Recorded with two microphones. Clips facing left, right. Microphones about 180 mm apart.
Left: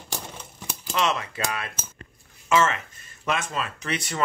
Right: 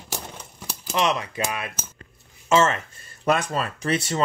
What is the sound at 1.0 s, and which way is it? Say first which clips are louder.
Speech: right 2 dB; 20° right (ahead or behind).